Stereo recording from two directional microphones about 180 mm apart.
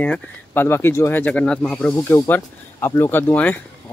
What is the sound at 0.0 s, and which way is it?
Speech, 10° left (ahead or behind).